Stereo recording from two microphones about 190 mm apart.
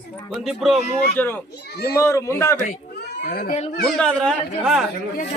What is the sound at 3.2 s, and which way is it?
Speech, 50° left (ahead or behind).